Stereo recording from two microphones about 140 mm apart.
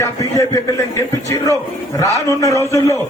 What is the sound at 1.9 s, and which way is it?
Speech, 25° left (ahead or behind).